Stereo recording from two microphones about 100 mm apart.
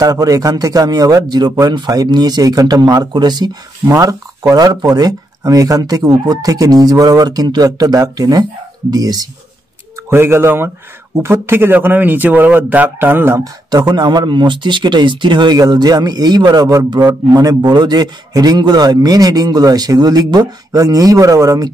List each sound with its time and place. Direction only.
0.0 s speech: 40° right (ahead or behind)
3.8 s speech: 35° right (ahead or behind)
10.0 s speech: 25° right (ahead or behind)
13.4 s speech: 40° right (ahead or behind)